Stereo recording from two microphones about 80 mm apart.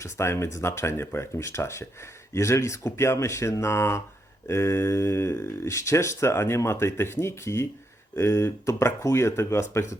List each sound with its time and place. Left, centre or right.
0.0 s speech: left